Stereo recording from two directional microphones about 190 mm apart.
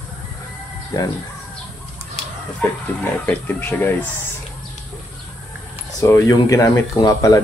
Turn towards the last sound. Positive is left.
turn(degrees=20)  # may be behind; listen again after turning